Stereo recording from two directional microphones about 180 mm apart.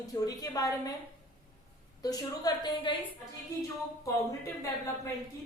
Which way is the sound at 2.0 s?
20° left (ahead or behind).